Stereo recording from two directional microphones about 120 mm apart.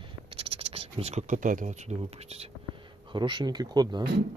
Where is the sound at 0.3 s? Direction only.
50° right (ahead or behind).